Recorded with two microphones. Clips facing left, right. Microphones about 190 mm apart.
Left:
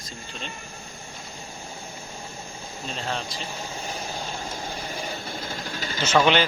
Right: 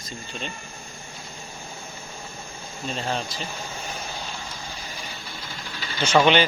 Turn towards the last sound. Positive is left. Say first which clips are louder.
# right 2 dB
turn(degrees=0)  # may be behind; listen again after turning